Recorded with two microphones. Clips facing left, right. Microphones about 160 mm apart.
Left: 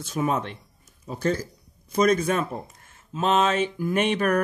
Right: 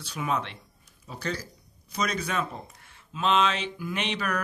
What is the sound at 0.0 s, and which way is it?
Speech, 45° left (ahead or behind).